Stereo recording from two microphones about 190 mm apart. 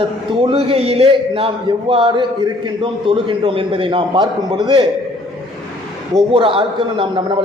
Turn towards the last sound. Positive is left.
turn(degrees=-25)  # may be behind; listen again after turning